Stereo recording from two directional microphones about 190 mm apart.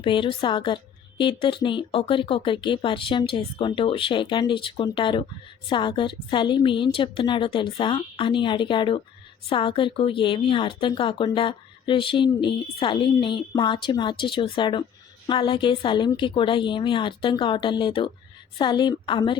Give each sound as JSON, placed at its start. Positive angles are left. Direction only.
{"t": 0.0, "sound": "a woman's voice", "side_deg": 25}